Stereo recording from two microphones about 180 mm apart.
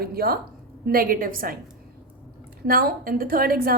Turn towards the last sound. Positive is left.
turn(degrees=-55)  # may be behind; listen again after turning